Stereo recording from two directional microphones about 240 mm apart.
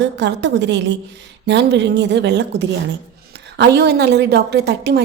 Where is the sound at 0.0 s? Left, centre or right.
Right.